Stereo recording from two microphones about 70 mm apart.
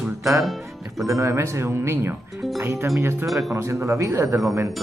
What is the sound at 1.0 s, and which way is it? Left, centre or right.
Speech, right.